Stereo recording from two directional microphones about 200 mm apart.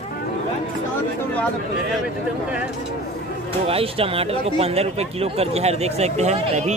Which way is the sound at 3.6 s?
30° right (ahead or behind).